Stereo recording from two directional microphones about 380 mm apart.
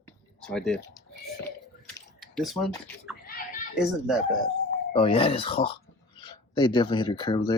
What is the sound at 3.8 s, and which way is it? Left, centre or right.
Speech, centre.